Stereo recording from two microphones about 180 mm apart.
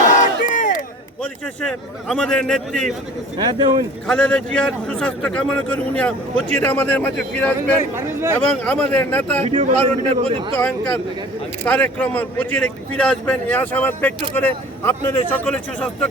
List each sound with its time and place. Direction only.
0.0 s crowd: 45° left (ahead or behind)
1.2 s speech: 5° left (ahead or behind)
3.3 s speech: 25° right (ahead or behind)
4.0 s speech: 5° left (ahead or behind)
7.8 s speech: 15° right (ahead or behind)
8.4 s speech: 10° left (ahead or behind)
9.4 s speech: 30° right (ahead or behind)
9.6 s a man's voice: 45° right (ahead or behind)
10.5 s speech: 10° left (ahead or behind)